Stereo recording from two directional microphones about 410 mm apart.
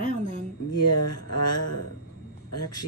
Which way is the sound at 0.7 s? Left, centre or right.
Left.